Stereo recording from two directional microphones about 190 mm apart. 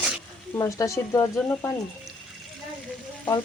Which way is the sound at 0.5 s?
15° left (ahead or behind).